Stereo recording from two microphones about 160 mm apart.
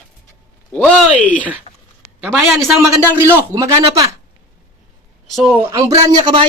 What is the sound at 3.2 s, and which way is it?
Speech, 15° right (ahead or behind).